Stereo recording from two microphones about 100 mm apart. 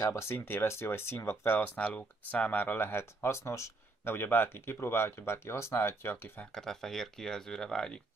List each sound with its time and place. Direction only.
0.0 s speech: 30° left (ahead or behind)
1.8 s speech: 10° left (ahead or behind)
6.5 s speech: 5° left (ahead or behind)